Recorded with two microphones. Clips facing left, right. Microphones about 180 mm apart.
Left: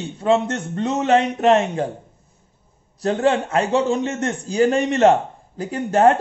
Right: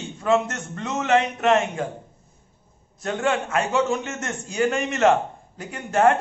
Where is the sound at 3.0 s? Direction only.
35° left (ahead or behind).